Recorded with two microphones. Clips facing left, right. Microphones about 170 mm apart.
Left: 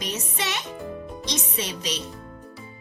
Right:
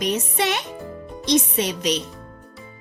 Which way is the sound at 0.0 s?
50° right (ahead or behind).